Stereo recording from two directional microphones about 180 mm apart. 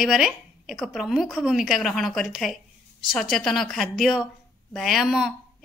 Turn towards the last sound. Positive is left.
turn(degrees=0)  # may be behind; listen again after turning